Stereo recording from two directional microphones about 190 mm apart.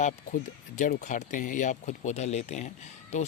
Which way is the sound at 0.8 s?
40° left (ahead or behind).